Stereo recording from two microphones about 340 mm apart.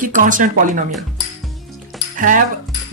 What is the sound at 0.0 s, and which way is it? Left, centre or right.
Speech, right.